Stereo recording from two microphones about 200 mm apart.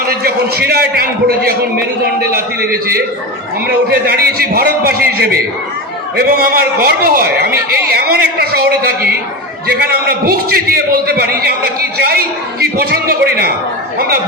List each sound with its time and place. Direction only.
0.1 s a man's voice: 50° right (ahead or behind)